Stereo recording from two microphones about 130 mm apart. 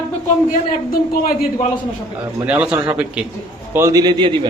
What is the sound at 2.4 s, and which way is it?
Speech, 10° right (ahead or behind).